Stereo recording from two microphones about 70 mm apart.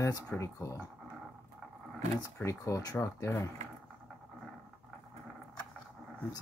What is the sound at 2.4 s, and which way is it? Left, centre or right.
Speech, left.